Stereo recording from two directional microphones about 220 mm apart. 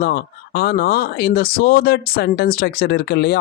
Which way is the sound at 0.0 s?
45° left (ahead or behind).